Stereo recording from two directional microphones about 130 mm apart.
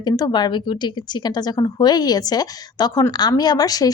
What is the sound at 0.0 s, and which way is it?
A woman's voice, 35° left (ahead or behind).